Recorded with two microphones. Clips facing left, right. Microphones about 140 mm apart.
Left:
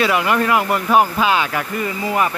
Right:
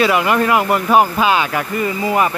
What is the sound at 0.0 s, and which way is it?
Speech, 15° right (ahead or behind).